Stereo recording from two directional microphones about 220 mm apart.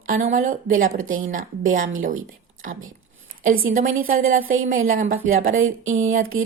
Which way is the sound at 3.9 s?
65° right (ahead or behind).